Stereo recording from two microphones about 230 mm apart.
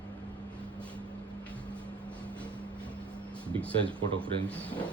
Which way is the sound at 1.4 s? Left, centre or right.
Centre.